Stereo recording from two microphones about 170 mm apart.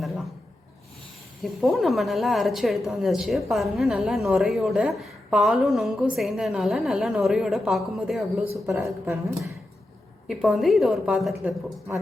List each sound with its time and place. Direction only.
1.4 s a woman's voice: centre (ahead or behind)
8.6 s speech: 15° right (ahead or behind)
10.2 s a woman's voice: centre (ahead or behind)